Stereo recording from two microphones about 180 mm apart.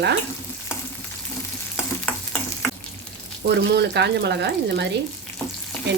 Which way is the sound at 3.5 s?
70° right (ahead or behind).